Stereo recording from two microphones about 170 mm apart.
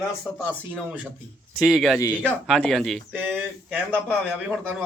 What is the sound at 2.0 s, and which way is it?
Speech, 15° left (ahead or behind).